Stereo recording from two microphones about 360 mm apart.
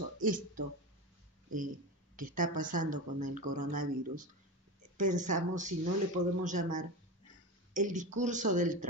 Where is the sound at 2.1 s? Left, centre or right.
Right.